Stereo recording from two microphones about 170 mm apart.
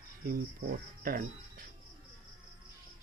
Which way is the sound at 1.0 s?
55° right (ahead or behind).